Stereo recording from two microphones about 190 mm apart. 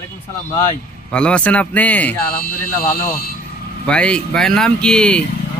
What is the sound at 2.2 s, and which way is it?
Speech, 50° left (ahead or behind).